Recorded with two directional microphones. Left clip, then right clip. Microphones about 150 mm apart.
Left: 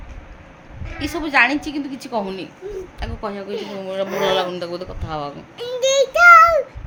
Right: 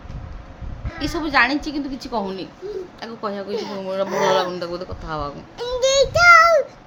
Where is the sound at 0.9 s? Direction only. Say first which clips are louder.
Left 1 dB; 10° left (ahead or behind).